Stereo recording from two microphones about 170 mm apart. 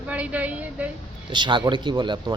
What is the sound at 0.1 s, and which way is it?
Speech, 10° right (ahead or behind).